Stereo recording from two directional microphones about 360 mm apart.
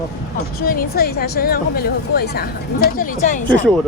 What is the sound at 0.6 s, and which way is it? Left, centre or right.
Speech, left.